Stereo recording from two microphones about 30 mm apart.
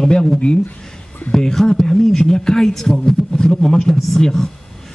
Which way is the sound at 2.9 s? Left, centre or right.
Left.